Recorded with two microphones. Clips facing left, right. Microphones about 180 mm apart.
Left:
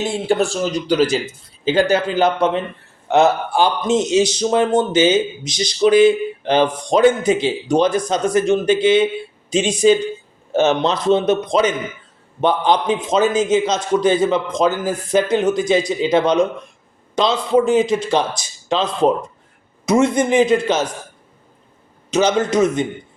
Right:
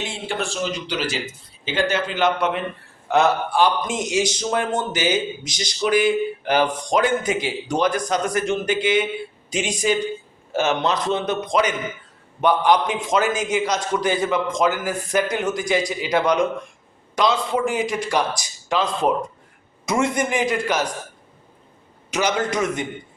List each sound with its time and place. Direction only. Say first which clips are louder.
0.0 s a man's voice: left 9 dB; 40° left (ahead or behind); by 19.1 s 25° left (ahead or behind)
19.8 s a sound: left 7 dB; 20° left (ahead or behind)
20.1 s a man's voice: left 7 dB; 25° left (ahead or behind)
22.1 s a man's voice: left 6 dB; 25° left (ahead or behind)